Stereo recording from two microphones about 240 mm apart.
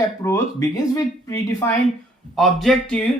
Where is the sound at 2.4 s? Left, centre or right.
Centre.